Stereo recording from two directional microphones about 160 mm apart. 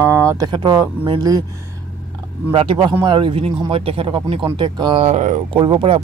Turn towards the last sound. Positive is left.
turn(degrees=-30)  # may be behind; listen again after turning